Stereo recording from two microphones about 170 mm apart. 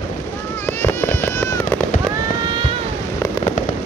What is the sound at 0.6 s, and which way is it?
Fireworks, 15° left (ahead or behind).